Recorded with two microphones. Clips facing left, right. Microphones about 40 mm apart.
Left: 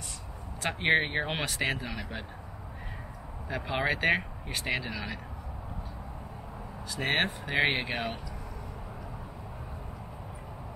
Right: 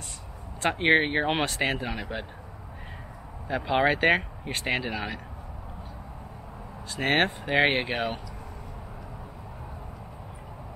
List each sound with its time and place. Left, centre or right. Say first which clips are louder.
0.7 s speech: right 4 dB; centre
1.3 s speech: right 4 dB; right
3.4 s speech: right 6 dB; right
6.9 s speech: right 4 dB; right
7.9 s speech: right 4 dB; centre